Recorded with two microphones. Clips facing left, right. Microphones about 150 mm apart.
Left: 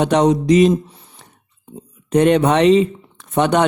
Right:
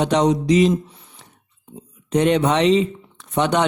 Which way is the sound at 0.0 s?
50° left (ahead or behind).